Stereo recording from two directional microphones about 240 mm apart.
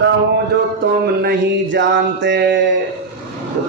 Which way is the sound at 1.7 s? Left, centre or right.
Right.